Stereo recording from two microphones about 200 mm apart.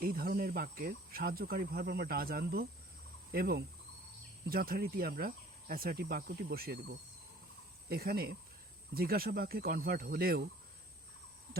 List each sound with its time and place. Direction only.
0.0 s speech: 50° right (ahead or behind)